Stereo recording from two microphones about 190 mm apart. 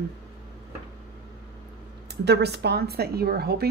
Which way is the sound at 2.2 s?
60° right (ahead or behind).